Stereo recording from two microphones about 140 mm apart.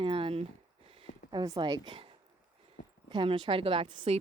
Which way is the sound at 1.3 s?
30° right (ahead or behind).